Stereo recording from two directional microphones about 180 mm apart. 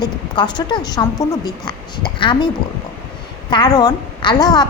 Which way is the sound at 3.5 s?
20° left (ahead or behind).